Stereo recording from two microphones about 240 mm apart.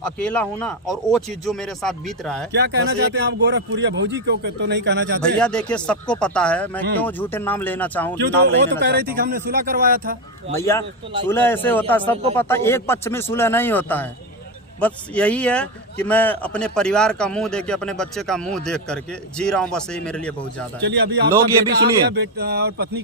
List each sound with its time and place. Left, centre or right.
0.0 s a man's voice: centre
2.5 s speech: right
5.4 s a man's voice: centre
8.4 s speech: right
10.6 s a man's voice: centre
20.8 s speech: right